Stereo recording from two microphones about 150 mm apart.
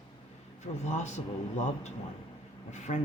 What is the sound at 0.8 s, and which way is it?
Speech, 50° left (ahead or behind).